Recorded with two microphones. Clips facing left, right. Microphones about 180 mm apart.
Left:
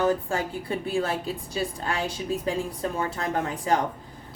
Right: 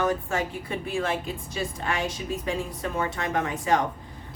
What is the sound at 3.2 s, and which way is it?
Speech, 35° left (ahead or behind).